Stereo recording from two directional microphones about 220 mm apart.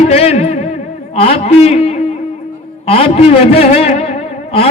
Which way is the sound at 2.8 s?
25° left (ahead or behind).